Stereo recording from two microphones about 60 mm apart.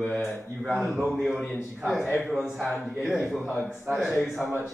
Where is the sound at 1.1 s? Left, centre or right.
Centre.